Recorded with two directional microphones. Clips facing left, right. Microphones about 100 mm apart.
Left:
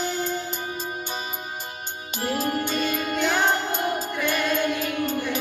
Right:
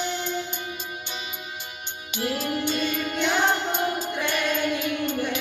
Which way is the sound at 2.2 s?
40° left (ahead or behind).